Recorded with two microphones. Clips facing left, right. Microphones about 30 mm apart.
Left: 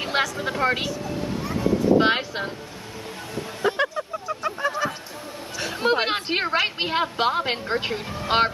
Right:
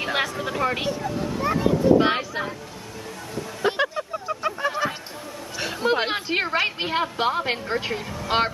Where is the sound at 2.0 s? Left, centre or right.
Left.